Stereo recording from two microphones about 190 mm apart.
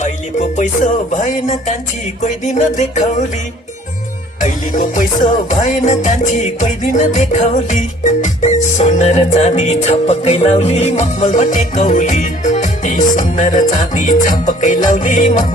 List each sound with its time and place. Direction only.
0.0 s music: 40° left (ahead or behind)
4.4 s music: 40° left (ahead or behind)